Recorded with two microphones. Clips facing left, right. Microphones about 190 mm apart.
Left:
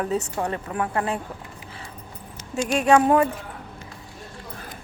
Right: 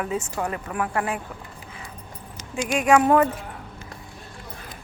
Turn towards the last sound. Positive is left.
turn(degrees=25)  # may be behind; listen again after turning